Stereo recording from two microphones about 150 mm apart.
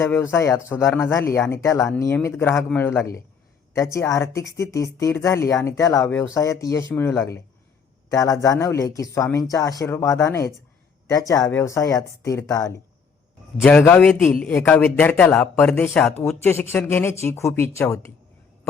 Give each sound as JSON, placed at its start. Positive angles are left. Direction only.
{"t": 0.0, "sound": "speech", "side_deg": 15}
{"t": 13.6, "sound": "speech", "side_deg": 5}